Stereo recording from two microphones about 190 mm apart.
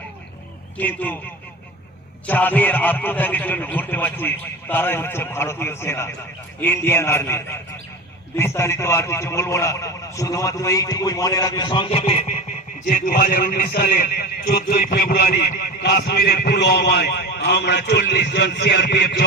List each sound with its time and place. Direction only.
0.8 s a man's voice: 10° left (ahead or behind)
2.2 s a man's voice: 10° left (ahead or behind); by 12.4 s 35° left (ahead or behind)
12.9 s a man's voice: 45° left (ahead or behind); by 19.2 s 65° left (ahead or behind)